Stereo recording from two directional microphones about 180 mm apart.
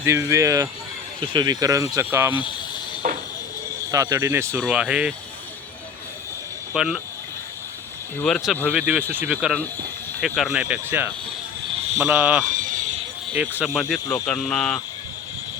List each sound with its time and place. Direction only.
0.0 s speech: 15° right (ahead or behind)
2.3 s a sound: 25° left (ahead or behind)
3.9 s speech: 20° right (ahead or behind)
6.7 s speech: centre (ahead or behind)
8.2 s speech: centre (ahead or behind)
12.5 s a sound: 45° right (ahead or behind)
13.4 s speech: 10° right (ahead or behind)
14.3 s speech: 5° left (ahead or behind)